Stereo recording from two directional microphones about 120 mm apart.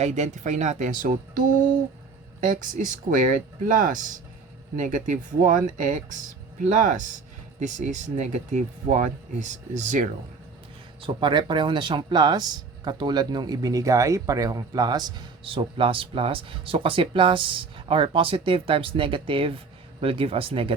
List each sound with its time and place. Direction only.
0.0 s speech: 75° right (ahead or behind); by 1.0 s 90° right
2.4 s speech: 90° right
11.0 s speech: 40° right (ahead or behind)